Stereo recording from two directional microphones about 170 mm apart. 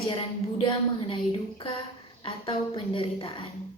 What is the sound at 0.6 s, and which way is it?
Speech, 30° left (ahead or behind).